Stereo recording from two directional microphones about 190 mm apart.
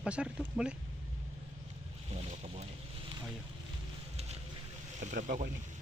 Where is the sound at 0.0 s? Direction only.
5° right (ahead or behind).